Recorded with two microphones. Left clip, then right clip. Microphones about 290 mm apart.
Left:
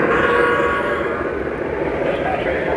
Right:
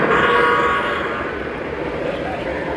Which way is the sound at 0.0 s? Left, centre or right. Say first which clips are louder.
Right 1 dB; right.